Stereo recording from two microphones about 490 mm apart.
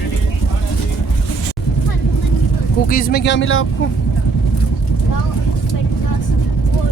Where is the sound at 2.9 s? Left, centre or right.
Centre.